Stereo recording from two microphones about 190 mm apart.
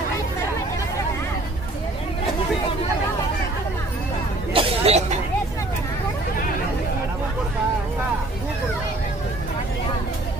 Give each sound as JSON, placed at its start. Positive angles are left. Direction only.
{"t": 4.5, "sound": "chatter", "side_deg": -30}